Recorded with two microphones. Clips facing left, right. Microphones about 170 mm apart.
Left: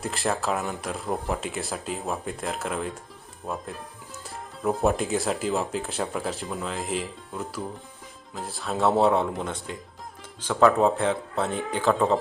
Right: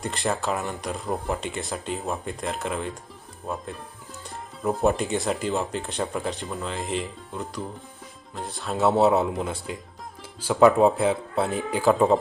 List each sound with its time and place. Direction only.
0.0 s speech: centre (ahead or behind)